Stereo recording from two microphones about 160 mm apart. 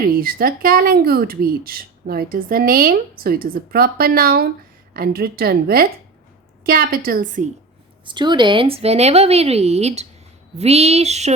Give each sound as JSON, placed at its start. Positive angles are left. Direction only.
{"t": 0.0, "sound": "a woman's voice", "side_deg": -65}
{"t": 8.0, "sound": "speech", "side_deg": -30}